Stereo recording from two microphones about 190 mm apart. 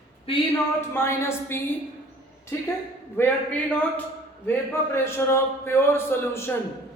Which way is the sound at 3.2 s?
10° left (ahead or behind).